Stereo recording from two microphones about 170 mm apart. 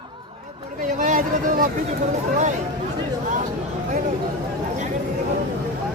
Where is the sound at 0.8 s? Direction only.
50° right (ahead or behind).